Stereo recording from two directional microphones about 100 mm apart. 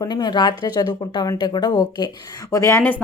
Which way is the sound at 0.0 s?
45° left (ahead or behind).